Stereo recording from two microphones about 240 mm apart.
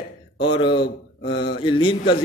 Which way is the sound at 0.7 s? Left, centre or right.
Left.